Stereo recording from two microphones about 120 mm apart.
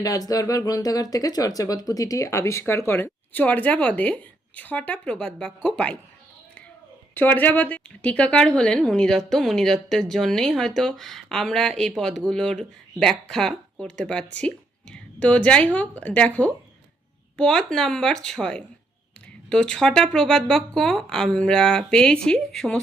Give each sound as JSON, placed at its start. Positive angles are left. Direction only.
{"t": 0.0, "sound": "speech", "side_deg": 30}
{"t": 7.1, "sound": "speech", "side_deg": 15}